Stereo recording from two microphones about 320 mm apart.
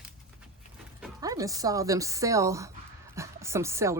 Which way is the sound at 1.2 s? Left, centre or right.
Centre.